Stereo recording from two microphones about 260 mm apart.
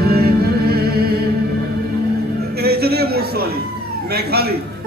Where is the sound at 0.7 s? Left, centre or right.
Right.